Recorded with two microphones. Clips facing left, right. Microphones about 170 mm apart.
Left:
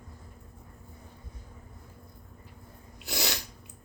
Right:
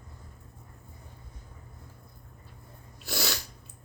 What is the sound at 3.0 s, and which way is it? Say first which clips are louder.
Sneeze: even; 20° left (ahead or behind).